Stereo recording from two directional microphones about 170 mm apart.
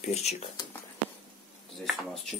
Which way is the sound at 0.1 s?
40° left (ahead or behind).